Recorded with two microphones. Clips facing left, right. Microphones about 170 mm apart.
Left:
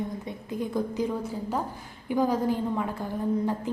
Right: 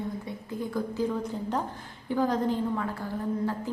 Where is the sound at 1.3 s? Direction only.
5° left (ahead or behind).